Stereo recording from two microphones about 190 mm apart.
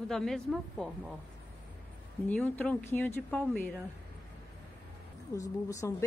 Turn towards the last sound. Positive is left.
turn(degrees=15)  # may be behind; listen again after turning